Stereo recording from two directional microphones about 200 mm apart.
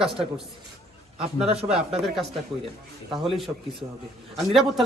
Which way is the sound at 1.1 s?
30° right (ahead or behind).